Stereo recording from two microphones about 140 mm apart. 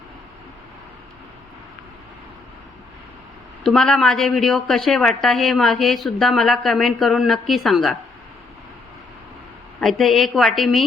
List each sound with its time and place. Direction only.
3.6 s a woman's voice: 5° left (ahead or behind)
9.8 s a woman's voice: centre (ahead or behind)